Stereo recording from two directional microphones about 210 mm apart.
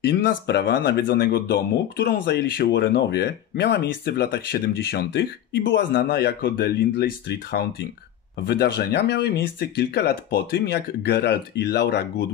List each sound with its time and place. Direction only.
0.0 s speech: 50° left (ahead or behind)